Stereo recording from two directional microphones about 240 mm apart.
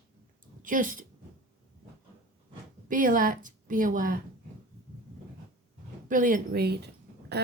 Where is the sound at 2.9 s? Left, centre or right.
Right.